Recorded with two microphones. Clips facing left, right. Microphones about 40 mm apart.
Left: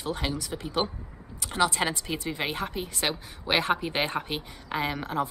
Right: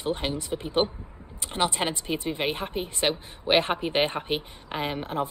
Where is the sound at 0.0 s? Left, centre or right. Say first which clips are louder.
Right 2 dB; right.